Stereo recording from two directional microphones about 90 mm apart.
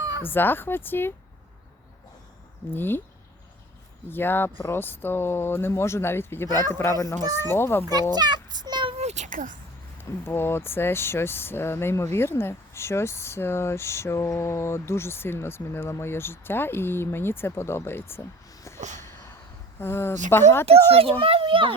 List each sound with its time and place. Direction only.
0.2 s speech: 25° left (ahead or behind)
2.6 s speech: 25° left (ahead or behind)
4.1 s speech: 25° left (ahead or behind)
8.1 s a sound: 50° right (ahead or behind)
10.0 s speech: 25° left (ahead or behind)
18.6 s a sound: 30° left (ahead or behind)
19.8 s speech: 25° left (ahead or behind)
20.7 s a child's voice: 90° right; by 21.7 s 75° right (ahead or behind)